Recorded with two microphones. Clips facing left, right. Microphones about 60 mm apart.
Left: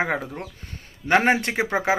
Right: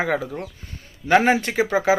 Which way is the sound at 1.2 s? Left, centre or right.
Left.